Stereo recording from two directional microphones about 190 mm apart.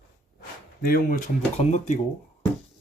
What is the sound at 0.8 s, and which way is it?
Speech, 45° left (ahead or behind).